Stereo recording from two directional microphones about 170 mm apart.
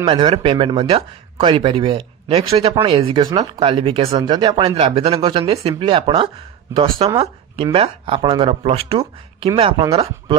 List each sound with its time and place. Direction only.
0.0 s speech: 25° right (ahead or behind)